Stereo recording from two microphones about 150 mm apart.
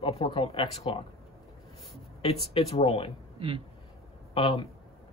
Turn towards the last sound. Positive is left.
turn(degrees=35)  # may be behind; listen again after turning